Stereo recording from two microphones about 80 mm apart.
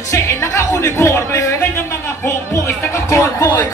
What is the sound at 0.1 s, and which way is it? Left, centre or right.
Music, left.